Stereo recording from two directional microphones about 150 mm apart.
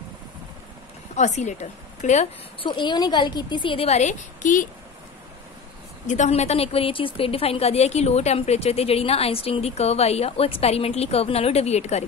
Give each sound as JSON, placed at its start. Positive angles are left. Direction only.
{"t": 1.1, "sound": "a woman's voice", "side_deg": 55}
{"t": 2.6, "sound": "a woman's voice", "side_deg": 30}
{"t": 6.0, "sound": "a woman's voice", "side_deg": 50}